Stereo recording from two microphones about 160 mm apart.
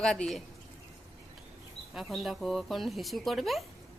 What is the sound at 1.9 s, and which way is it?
Speech, centre (ahead or behind).